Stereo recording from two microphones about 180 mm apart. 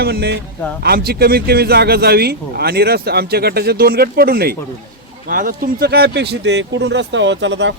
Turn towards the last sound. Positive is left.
turn(degrees=-85)